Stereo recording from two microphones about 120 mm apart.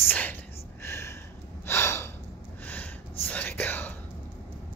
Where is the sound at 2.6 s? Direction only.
10° left (ahead or behind).